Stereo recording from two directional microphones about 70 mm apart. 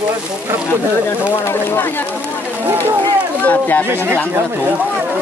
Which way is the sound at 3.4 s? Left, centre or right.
Left.